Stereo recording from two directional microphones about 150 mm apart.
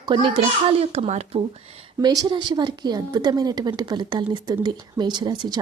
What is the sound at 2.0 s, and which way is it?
A woman's voice, 30° right (ahead or behind).